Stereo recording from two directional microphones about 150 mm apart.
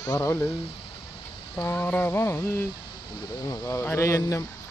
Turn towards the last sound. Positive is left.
turn(degrees=20)  # may be behind; listen again after turning